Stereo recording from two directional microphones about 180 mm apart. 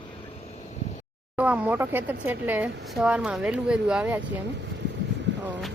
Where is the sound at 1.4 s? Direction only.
5° right (ahead or behind).